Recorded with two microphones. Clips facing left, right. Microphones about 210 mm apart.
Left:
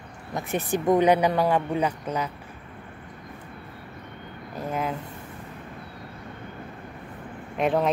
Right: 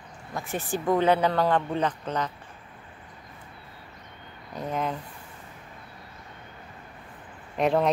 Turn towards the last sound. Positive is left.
turn(degrees=0)  # may be behind; listen again after turning